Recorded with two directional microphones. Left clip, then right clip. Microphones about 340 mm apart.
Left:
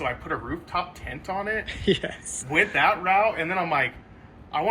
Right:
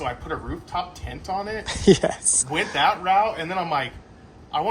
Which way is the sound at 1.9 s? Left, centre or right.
Right.